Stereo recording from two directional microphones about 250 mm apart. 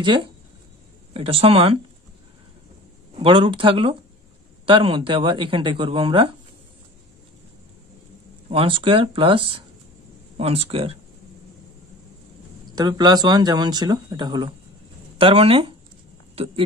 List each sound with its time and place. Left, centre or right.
0.0 s speech: centre
3.2 s speech: centre
8.5 s speech: right
12.7 s speech: centre